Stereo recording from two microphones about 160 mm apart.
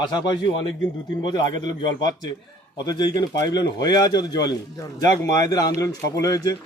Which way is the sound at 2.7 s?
25° left (ahead or behind).